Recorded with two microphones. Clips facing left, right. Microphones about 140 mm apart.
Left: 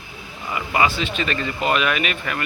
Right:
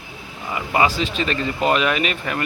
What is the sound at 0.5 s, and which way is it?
Speech, 30° right (ahead or behind).